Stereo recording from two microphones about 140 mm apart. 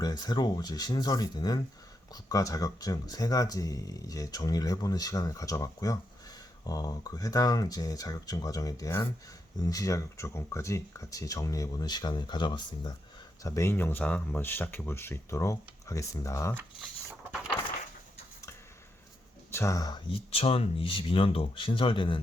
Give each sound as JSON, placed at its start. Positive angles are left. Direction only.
{"t": 0.0, "sound": "speech", "side_deg": 30}
{"t": 13.4, "sound": "speech", "side_deg": 20}
{"t": 19.5, "sound": "speech", "side_deg": 20}